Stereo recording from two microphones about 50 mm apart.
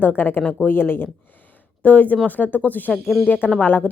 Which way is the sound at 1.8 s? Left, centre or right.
Left.